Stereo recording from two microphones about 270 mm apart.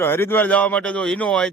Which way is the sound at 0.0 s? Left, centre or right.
Centre.